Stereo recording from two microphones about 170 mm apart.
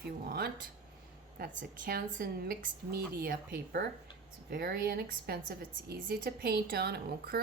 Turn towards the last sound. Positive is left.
turn(degrees=-70)  # may be behind; listen again after turning